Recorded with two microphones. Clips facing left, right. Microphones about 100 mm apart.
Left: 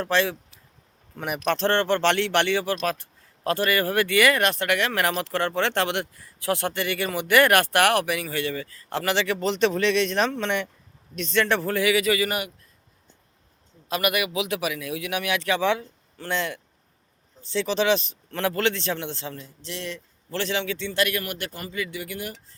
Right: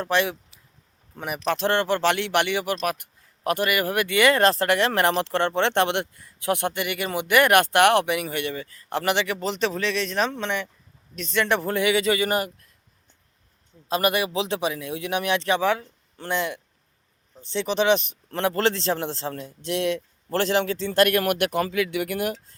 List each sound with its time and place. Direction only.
0.0 s speech: 15° right (ahead or behind)
1.5 s speech: 10° right (ahead or behind); by 12.5 s 30° right (ahead or behind)
13.8 s speech: 30° right (ahead or behind)
18.5 s speech: 30° right (ahead or behind)
19.3 s a man's voice: 55° right (ahead or behind)